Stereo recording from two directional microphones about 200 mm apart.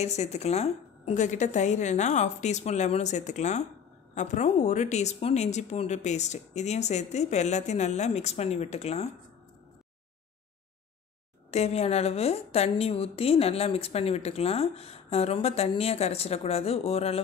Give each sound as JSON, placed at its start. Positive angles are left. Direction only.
{"t": 0.0, "sound": "a woman's voice", "side_deg": 35}
{"t": 11.5, "sound": "a woman's voice", "side_deg": 35}